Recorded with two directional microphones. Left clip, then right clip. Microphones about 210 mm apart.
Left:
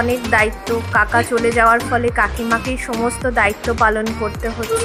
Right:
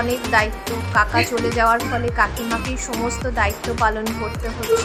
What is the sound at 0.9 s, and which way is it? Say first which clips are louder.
Speech: left 2 dB; 20° left (ahead or behind).